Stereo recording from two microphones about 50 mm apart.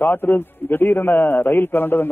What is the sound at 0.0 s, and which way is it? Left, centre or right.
A man's voice, left.